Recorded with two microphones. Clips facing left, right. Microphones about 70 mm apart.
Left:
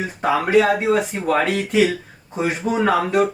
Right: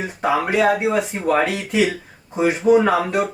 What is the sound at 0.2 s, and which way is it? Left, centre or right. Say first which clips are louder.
Speech: left 2 dB; centre.